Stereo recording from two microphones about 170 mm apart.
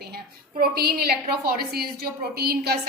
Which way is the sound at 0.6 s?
65° right (ahead or behind).